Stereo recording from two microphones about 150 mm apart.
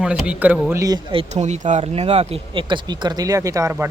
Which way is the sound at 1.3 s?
50° right (ahead or behind).